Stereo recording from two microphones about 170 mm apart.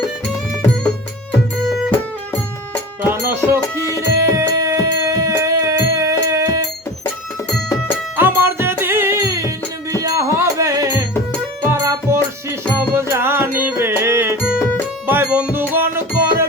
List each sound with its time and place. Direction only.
1.6 s music: centre (ahead or behind)
3.0 s music: 15° right (ahead or behind)
8.1 s music: 10° right (ahead or behind)